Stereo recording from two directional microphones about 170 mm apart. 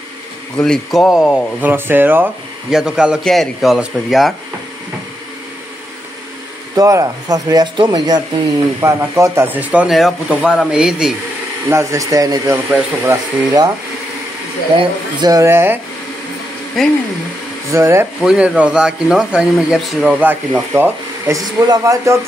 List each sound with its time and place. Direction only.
0.6 s speech: centre (ahead or behind)
6.7 s speech: 20° right (ahead or behind); by 11.1 s 5° right (ahead or behind)
11.7 s speech: 15° right (ahead or behind)
14.8 s speech: 25° right (ahead or behind)
17.6 s speech: 15° right (ahead or behind)
18.2 s speech: 5° right (ahead or behind)